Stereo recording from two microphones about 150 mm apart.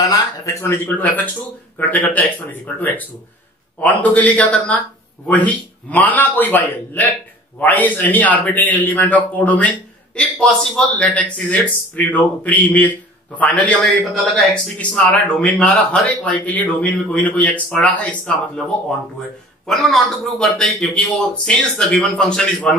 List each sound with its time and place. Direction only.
0.0 s speech: 25° left (ahead or behind)
19.6 s a man's voice: centre (ahead or behind)